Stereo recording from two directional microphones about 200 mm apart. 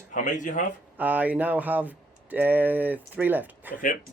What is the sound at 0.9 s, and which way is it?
Speech, 10° right (ahead or behind).